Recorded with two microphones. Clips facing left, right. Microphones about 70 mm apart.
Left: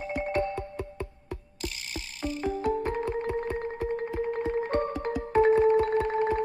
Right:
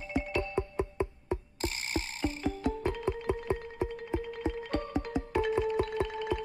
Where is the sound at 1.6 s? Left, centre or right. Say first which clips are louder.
Right 3 dB; right.